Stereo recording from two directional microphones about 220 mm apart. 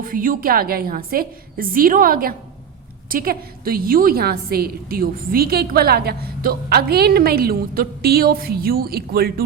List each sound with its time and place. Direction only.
0.0 s a woman's voice: 40° right (ahead or behind)